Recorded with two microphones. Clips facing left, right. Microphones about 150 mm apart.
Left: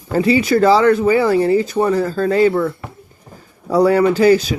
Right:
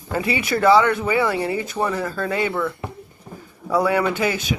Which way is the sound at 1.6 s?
30° left (ahead or behind).